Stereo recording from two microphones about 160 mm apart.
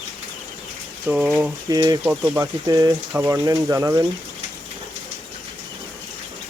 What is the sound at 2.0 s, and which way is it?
Speech, 10° right (ahead or behind).